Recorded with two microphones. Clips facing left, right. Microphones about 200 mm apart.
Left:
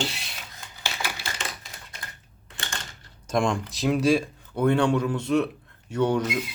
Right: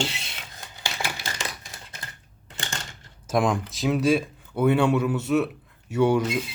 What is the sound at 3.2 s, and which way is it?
Speech, 5° right (ahead or behind).